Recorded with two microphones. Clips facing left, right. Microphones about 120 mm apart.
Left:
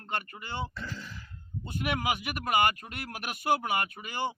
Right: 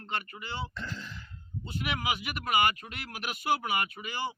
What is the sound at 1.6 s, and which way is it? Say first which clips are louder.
Speech: left 2 dB; 50° left (ahead or behind).